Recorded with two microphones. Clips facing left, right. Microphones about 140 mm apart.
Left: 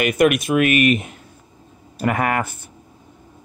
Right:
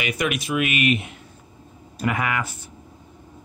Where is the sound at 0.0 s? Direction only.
50° left (ahead or behind).